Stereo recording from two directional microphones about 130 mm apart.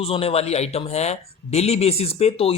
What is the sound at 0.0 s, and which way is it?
A man's voice, 50° left (ahead or behind).